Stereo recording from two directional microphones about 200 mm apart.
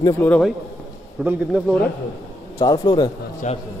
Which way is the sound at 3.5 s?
35° left (ahead or behind).